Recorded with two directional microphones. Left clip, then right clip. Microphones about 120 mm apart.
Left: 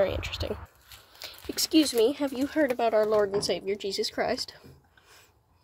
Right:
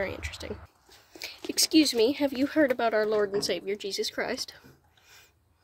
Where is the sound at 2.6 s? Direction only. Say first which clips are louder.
Left 1 dB; 10° right (ahead or behind).